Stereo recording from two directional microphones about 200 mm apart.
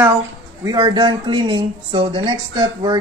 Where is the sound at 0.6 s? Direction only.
20° right (ahead or behind).